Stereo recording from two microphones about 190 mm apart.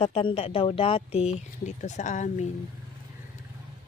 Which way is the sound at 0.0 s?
30° left (ahead or behind).